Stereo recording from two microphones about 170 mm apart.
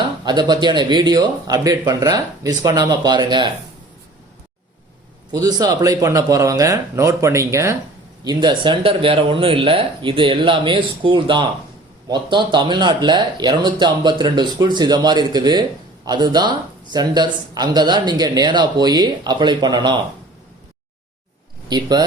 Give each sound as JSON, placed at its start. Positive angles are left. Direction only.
{"t": 0.3, "sound": "speech", "side_deg": -25}
{"t": 5.3, "sound": "speech", "side_deg": -25}
{"t": 21.7, "sound": "speech", "side_deg": -25}